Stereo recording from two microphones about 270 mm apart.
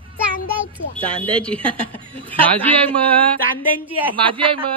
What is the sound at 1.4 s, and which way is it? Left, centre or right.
Speech, centre.